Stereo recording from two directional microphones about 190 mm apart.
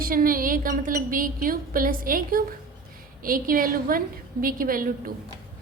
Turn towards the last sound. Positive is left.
turn(degrees=-45)  # may be behind; listen again after turning